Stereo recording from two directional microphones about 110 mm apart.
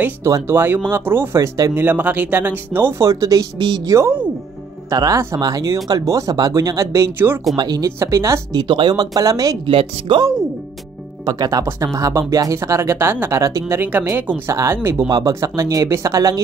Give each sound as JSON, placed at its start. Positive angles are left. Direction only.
{"t": 0.0, "sound": "speech", "side_deg": -25}
{"t": 3.5, "sound": "speech", "side_deg": -45}
{"t": 4.8, "sound": "speech", "side_deg": -35}
{"t": 7.5, "sound": "speech", "side_deg": -35}
{"t": 8.5, "sound": "speech", "side_deg": -45}
{"t": 9.7, "sound": "speech", "side_deg": -55}
{"t": 11.2, "sound": "speech", "side_deg": -35}
{"t": 15.0, "sound": "speech", "side_deg": -35}